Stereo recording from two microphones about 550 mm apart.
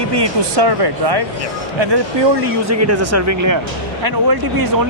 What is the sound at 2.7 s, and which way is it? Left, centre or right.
Speech, right.